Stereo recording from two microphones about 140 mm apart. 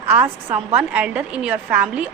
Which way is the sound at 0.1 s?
10° right (ahead or behind).